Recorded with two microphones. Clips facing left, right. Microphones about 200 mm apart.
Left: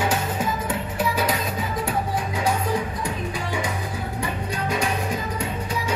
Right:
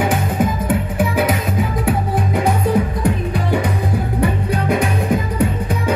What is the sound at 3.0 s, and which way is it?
Music, 60° right (ahead or behind).